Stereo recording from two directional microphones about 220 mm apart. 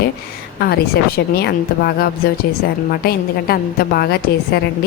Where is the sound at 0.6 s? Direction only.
45° left (ahead or behind).